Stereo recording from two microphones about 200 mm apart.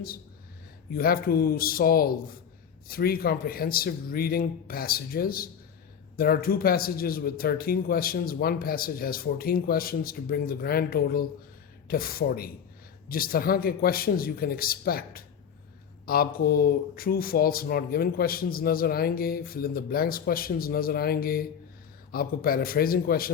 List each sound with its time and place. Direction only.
0.9 s speech: 50° left (ahead or behind)